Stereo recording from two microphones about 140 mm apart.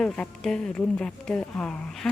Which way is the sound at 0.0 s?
5° left (ahead or behind).